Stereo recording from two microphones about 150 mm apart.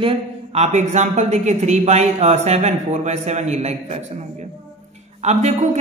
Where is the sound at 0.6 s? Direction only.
50° right (ahead or behind).